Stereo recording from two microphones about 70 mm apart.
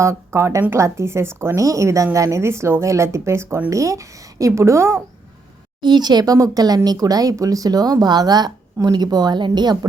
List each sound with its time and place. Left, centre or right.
0.0 s a woman's voice: right
5.8 s a woman's voice: right
6.3 s speech: right